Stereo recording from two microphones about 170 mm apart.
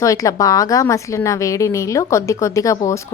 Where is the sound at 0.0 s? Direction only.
20° left (ahead or behind).